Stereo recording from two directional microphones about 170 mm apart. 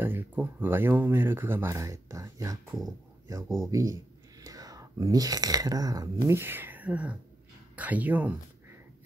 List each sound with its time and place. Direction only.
0.0 s speech: 10° right (ahead or behind)
3.4 s speech: centre (ahead or behind)
3.7 s speech: 20° right (ahead or behind)